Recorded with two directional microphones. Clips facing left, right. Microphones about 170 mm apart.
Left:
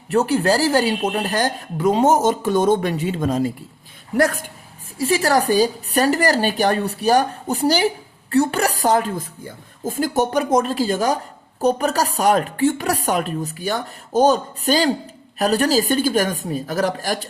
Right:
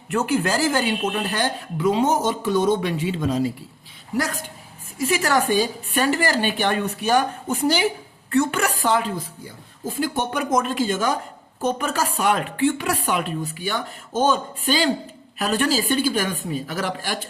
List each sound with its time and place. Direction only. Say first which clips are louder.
0.1 s speech: left 4 dB; 35° left (ahead or behind); by 4.4 s 50° left (ahead or behind)
4.9 s speech: left 3 dB; 35° left (ahead or behind)